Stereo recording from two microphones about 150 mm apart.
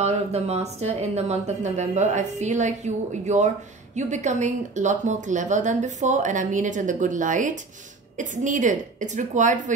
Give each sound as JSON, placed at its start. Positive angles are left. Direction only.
{"t": 0.0, "sound": "a woman's voice", "side_deg": -45}